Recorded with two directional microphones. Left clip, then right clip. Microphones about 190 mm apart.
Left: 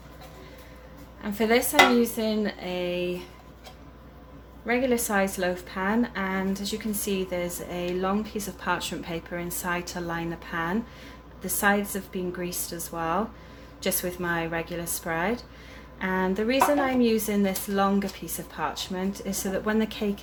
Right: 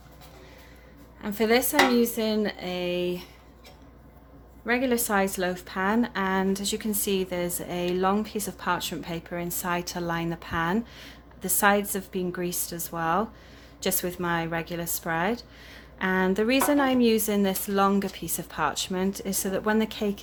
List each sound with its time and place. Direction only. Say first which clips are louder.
1.2 s a woman's voice: even; 25° right (ahead or behind)
4.6 s a woman's voice: even; 30° right (ahead or behind)